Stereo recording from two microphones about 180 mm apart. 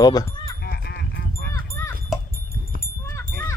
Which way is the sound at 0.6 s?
65° left (ahead or behind).